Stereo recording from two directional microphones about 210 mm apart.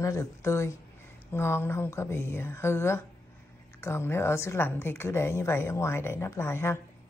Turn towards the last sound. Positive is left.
turn(degrees=10)  # may be behind; listen again after turning